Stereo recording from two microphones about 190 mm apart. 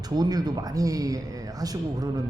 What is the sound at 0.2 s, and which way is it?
A man's voice, 20° right (ahead or behind).